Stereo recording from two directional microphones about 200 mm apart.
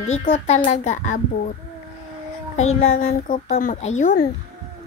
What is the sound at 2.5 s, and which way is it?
A child's voice, 30° left (ahead or behind).